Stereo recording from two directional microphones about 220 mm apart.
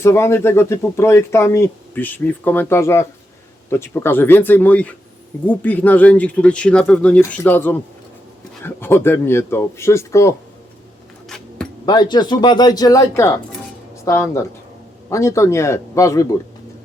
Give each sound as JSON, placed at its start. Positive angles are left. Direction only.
{"t": 0.0, "sound": "speech", "side_deg": 10}
{"t": 11.3, "sound": "a sound", "side_deg": 5}
{"t": 11.9, "sound": "speech", "side_deg": 20}